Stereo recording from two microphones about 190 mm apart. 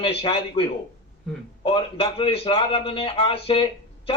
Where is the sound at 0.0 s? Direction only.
30° left (ahead or behind).